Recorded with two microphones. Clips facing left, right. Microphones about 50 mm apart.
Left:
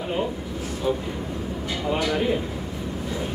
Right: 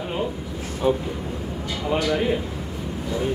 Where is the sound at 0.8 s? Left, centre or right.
Right.